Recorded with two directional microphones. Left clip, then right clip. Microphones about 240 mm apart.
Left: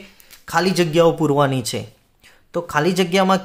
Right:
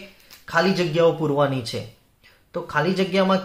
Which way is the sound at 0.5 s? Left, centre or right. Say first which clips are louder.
Left 2 dB; left.